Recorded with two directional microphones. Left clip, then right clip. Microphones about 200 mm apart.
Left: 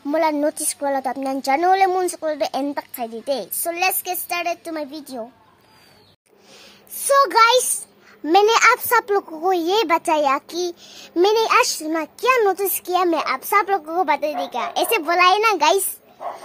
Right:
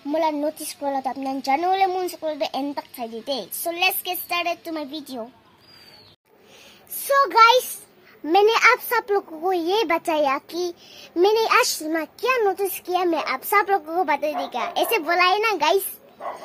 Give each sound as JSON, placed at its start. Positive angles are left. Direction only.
{"t": 0.1, "sound": "a child's voice", "side_deg": 20}
{"t": 7.0, "sound": "a child's voice", "side_deg": 25}